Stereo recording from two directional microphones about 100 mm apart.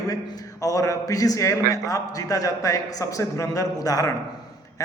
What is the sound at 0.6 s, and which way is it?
A man's voice, 35° left (ahead or behind).